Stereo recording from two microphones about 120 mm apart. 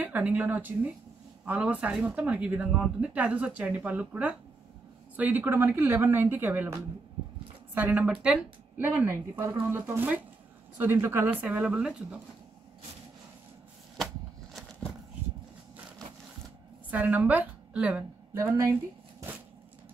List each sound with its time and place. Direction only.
0.0 s speech: 10° right (ahead or behind)
16.9 s a woman's voice: 15° right (ahead or behind)
18.3 s speech: 25° right (ahead or behind)